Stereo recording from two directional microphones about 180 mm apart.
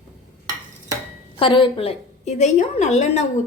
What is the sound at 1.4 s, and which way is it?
A woman's voice, 30° left (ahead or behind).